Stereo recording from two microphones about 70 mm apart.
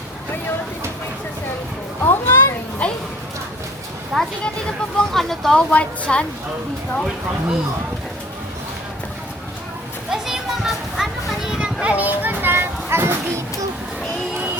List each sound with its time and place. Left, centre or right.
2.0 s a sound: left
4.1 s a woman's voice: centre
10.1 s children playing: centre; by 13.4 s right